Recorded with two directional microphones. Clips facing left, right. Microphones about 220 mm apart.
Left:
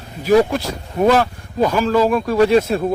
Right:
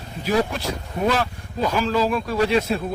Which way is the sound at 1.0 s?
50° left (ahead or behind).